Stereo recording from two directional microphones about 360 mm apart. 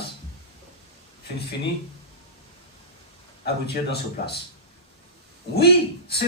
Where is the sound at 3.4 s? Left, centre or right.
Left.